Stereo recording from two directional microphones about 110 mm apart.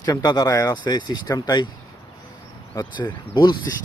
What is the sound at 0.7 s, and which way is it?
Speech, 45° left (ahead or behind).